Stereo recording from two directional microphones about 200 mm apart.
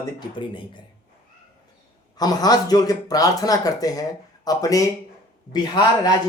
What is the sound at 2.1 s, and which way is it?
A man's voice, 20° left (ahead or behind).